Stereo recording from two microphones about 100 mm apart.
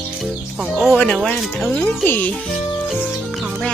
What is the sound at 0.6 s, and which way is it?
Speech, 10° right (ahead or behind).